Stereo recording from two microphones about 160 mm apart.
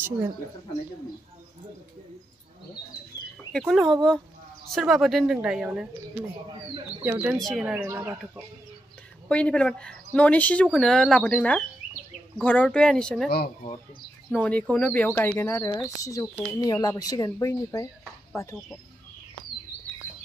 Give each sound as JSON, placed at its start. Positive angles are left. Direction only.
{"t": 3.5, "sound": "speech", "side_deg": 0}
{"t": 7.0, "sound": "speech", "side_deg": -15}
{"t": 7.3, "sound": "speech", "side_deg": 0}
{"t": 7.6, "sound": "speech", "side_deg": -10}
{"t": 9.3, "sound": "speech", "side_deg": 5}
{"t": 14.3, "sound": "speech", "side_deg": 10}